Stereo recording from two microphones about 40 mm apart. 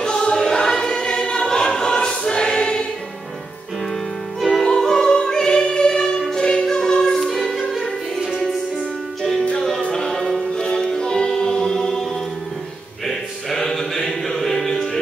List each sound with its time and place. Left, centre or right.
0.0 s choir: centre
4.4 s music: centre
9.8 s music: left
10.1 s music: centre
10.5 s music: left; by 14.9 s centre